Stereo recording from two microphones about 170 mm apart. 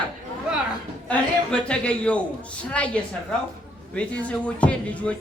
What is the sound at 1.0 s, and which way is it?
A man's voice, 5° left (ahead or behind).